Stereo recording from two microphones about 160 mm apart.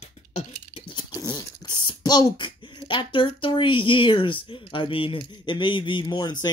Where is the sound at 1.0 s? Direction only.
25° left (ahead or behind).